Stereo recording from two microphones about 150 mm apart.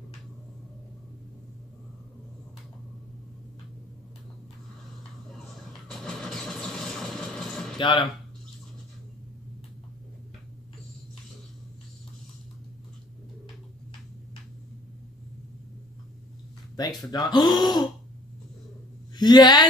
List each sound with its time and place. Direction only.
5.3 s vehicle: centre (ahead or behind)
7.7 s a sound: 35° left (ahead or behind)
16.8 s speech: 25° left (ahead or behind)
19.1 s speech: 30° left (ahead or behind)